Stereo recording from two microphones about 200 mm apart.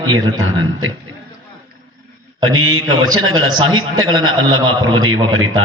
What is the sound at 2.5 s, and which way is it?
A man's voice, 90° right.